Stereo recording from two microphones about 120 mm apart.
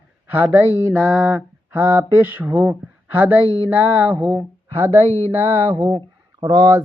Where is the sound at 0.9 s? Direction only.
Centre (ahead or behind).